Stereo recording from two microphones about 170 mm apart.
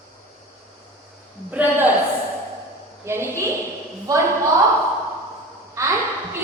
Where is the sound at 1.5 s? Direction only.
10° right (ahead or behind).